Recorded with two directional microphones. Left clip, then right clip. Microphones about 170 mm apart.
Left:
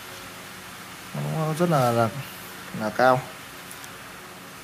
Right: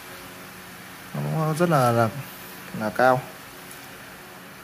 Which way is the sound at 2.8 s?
10° right (ahead or behind).